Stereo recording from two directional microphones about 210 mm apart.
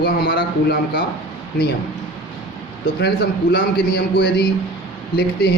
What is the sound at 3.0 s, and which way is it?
Speech, 50° left (ahead or behind).